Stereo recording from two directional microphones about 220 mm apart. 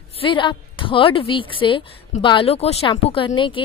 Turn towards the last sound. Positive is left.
turn(degrees=20)  # may be behind; listen again after turning